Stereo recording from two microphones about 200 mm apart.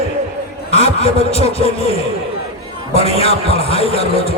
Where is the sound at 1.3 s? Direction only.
30° left (ahead or behind).